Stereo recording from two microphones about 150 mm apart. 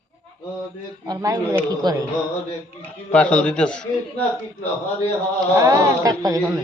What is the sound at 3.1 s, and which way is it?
Speech, 10° left (ahead or behind).